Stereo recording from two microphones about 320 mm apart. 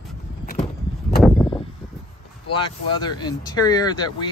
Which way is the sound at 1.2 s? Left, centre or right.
Centre.